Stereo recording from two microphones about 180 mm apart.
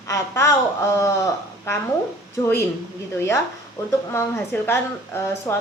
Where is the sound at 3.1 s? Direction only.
15° left (ahead or behind).